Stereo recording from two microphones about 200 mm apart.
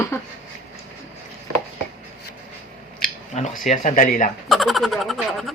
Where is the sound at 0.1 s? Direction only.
15° left (ahead or behind).